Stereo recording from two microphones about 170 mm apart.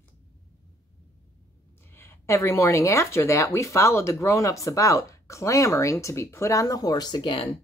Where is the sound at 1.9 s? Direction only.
15° left (ahead or behind).